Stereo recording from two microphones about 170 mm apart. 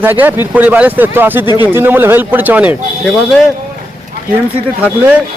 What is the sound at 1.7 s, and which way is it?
Speech, 15° right (ahead or behind).